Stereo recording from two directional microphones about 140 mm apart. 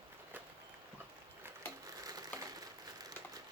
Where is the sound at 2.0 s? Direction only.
25° right (ahead or behind).